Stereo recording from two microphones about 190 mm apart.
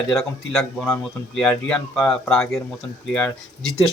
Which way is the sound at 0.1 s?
Centre (ahead or behind).